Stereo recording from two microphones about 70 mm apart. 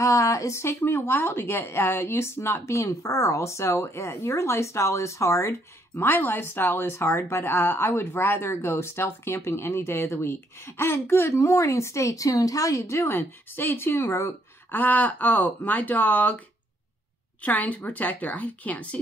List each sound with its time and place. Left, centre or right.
0.0 s speech: left
14.0 s speech: left
14.7 s speech: left
17.4 s speech: left